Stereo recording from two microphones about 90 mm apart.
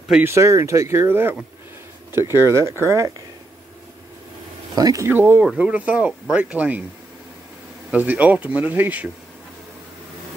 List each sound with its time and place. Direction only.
0.2 s speech: 30° right (ahead or behind)
4.7 s speech: 45° right (ahead or behind)
5.0 s speech: 25° right (ahead or behind)
7.9 s speech: 20° right (ahead or behind)